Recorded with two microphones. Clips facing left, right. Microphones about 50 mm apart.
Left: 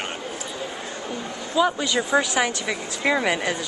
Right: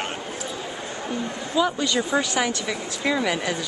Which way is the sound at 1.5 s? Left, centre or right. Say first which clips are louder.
Left 1 dB; centre.